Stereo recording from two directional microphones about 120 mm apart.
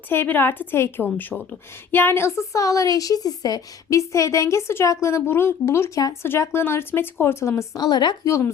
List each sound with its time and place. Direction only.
0.1 s a woman's voice: 15° left (ahead or behind); by 8.3 s 35° left (ahead or behind)
8.3 s speech: 25° left (ahead or behind)